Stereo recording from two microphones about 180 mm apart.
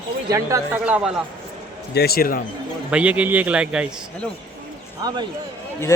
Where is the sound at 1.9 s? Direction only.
60° left (ahead or behind).